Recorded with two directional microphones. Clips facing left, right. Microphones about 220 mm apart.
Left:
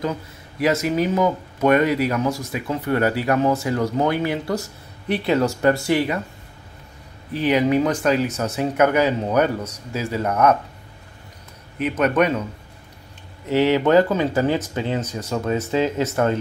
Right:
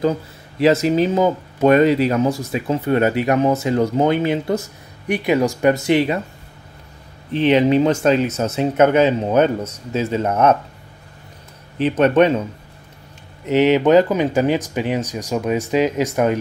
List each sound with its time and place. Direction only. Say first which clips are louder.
0.0 s speech: right 6 dB; 30° right (ahead or behind)
7.3 s speech: right 4 dB; 25° right (ahead or behind)
11.8 s speech: right 5 dB; 30° right (ahead or behind)
13.5 s speech: right 3 dB; 20° right (ahead or behind)